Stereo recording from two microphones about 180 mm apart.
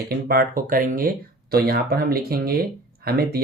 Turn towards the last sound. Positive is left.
turn(degrees=-60)  # may be behind; listen again after turning